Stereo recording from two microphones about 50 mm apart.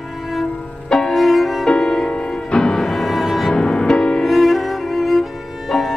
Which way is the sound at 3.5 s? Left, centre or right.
Centre.